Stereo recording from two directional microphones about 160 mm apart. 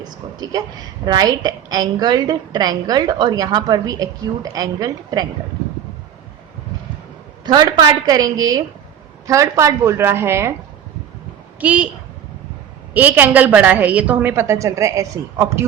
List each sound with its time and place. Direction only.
0.0 s a woman's voice: 25° right (ahead or behind)
7.4 s a woman's voice: 25° right (ahead or behind)
11.6 s a woman's voice: 10° right (ahead or behind)
12.9 s a woman's voice: 10° right (ahead or behind)